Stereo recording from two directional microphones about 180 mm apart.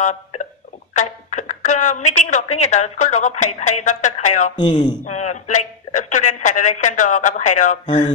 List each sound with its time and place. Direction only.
0.0 s hiccup: 40° left (ahead or behind)
0.9 s a sound: 40° left (ahead or behind)
2.4 s a woman's voice: 40° left (ahead or behind)
4.6 s speech: 25° left (ahead or behind)
5.0 s a woman's voice: 40° left (ahead or behind)